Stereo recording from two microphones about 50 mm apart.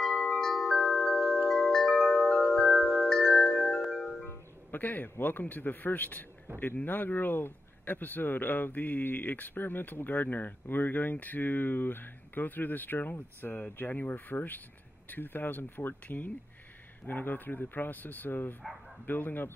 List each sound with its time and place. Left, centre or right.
0.0 s chime: centre
1.5 s wind chime: centre
2.5 s music: centre
3.1 s wind chime: centre
3.4 s chime: centre
4.3 s music: left
5.2 s speech: left